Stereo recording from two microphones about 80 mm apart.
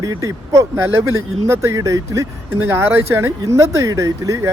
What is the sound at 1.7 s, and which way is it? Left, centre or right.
Speech, right.